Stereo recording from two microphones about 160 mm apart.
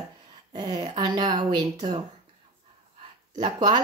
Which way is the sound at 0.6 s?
25° right (ahead or behind).